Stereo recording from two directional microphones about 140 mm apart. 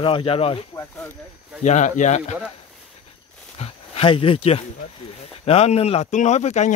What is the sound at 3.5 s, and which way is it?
Speech, 45° left (ahead or behind).